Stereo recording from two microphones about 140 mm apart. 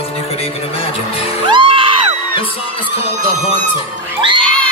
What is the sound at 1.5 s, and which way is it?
Music, 40° right (ahead or behind).